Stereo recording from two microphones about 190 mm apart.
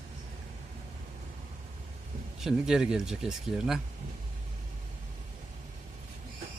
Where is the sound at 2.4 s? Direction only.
5° right (ahead or behind).